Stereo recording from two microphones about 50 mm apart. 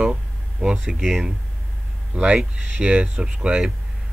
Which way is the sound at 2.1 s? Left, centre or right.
Centre.